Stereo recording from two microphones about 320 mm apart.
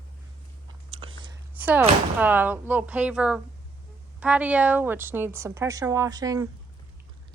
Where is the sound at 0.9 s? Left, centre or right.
Centre.